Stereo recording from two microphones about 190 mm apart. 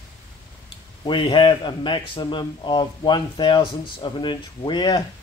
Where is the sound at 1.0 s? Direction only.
25° left (ahead or behind).